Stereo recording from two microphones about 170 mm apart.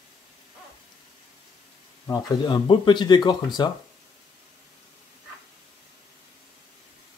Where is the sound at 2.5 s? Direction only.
25° left (ahead or behind).